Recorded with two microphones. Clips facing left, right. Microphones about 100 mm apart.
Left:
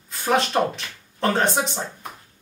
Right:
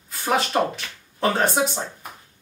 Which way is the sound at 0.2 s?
Centre (ahead or behind).